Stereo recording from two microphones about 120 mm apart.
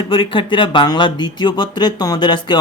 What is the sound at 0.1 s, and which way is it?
Speech, 45° left (ahead or behind).